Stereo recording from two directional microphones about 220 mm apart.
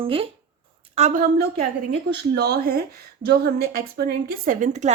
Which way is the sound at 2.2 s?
45° right (ahead or behind).